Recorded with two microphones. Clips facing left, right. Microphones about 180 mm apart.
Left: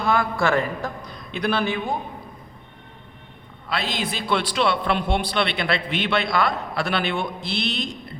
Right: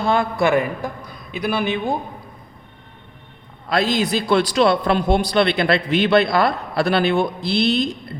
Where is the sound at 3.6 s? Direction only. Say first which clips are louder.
Right 8 dB; 40° right (ahead or behind).